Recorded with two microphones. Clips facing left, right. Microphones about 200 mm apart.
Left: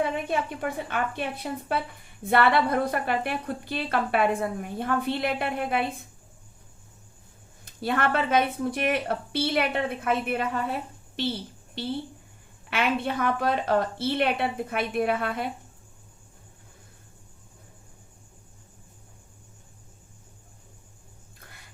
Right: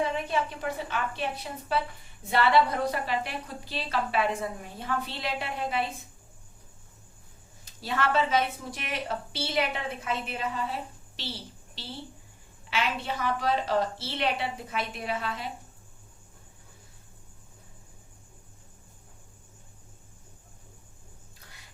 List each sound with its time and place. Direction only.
0.3 s a woman's voice: 55° left (ahead or behind)
7.6 s a woman's voice: 55° left (ahead or behind)
21.4 s biting: 55° left (ahead or behind)